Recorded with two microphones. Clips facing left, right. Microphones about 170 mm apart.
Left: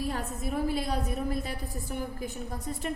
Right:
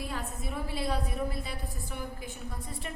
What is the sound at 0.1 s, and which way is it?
A woman's voice, 45° left (ahead or behind).